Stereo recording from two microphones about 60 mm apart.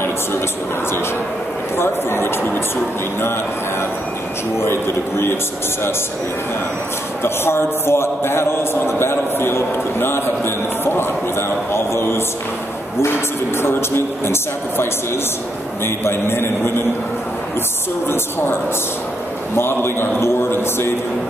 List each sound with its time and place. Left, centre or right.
1.8 s a man's voice: left
4.6 s a man's voice: left
7.2 s a man's voice: left
13.6 s a man's voice: left
18.0 s a man's voice: left